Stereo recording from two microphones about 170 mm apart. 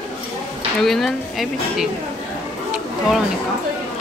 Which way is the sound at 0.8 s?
Centre (ahead or behind).